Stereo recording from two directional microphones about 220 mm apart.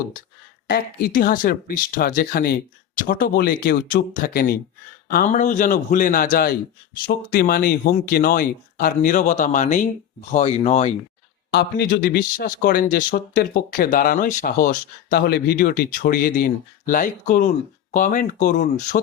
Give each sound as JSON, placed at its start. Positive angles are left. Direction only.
{"t": 0.7, "sound": "speech", "side_deg": 40}
{"t": 11.5, "sound": "speech", "side_deg": 45}